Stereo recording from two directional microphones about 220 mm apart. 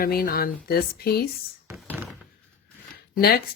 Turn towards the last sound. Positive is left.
turn(degrees=45)  # may be behind; listen again after turning